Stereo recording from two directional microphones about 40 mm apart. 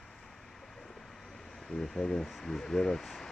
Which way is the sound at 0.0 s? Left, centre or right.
Centre.